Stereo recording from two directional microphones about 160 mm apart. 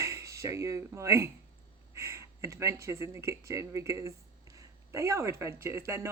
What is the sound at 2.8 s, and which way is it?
Speech, 15° right (ahead or behind).